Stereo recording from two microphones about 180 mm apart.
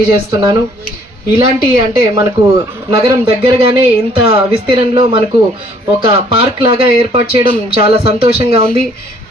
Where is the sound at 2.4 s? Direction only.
30° right (ahead or behind).